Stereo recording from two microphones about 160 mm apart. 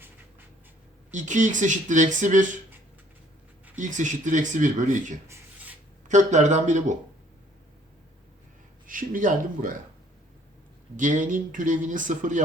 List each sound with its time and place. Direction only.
1.1 s speech: 50° right (ahead or behind)
3.8 s speech: 50° right (ahead or behind)
5.3 s a sound: 10° right (ahead or behind)
6.1 s speech: 50° right (ahead or behind)
8.9 s speech: 55° right (ahead or behind)
10.9 s speech: 55° right (ahead or behind)